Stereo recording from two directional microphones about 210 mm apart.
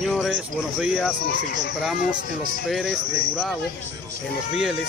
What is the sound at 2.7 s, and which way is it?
Speech, centre (ahead or behind).